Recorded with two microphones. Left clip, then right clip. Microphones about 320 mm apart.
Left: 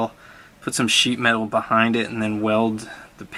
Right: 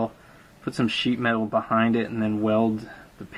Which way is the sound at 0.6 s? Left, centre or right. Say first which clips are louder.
Left 7 dB; centre.